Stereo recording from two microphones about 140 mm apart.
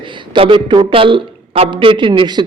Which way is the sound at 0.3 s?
35° right (ahead or behind).